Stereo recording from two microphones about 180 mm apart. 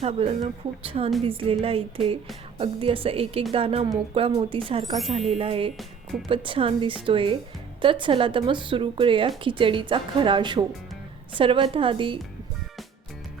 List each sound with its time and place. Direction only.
0.0 s speech: 35° right (ahead or behind)